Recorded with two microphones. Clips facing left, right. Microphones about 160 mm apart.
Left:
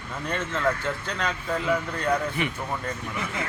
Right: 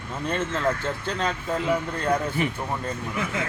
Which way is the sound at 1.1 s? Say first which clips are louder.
Right 4 dB; 30° right (ahead or behind).